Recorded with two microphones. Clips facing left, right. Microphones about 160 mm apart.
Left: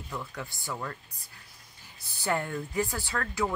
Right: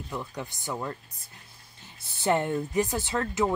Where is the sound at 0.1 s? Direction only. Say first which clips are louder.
Right 2 dB; 20° right (ahead or behind).